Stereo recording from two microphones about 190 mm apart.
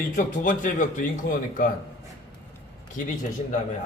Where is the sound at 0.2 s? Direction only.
45° left (ahead or behind).